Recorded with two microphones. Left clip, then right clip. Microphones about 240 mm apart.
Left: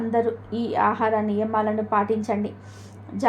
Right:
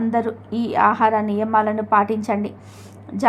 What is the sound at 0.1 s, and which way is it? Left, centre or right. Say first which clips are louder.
A woman's voice: right 1 dB; right.